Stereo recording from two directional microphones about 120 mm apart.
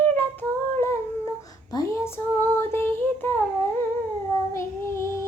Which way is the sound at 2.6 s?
20° left (ahead or behind).